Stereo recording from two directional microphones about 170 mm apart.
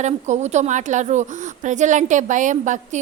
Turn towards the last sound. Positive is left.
turn(degrees=-45)  # may be behind; listen again after turning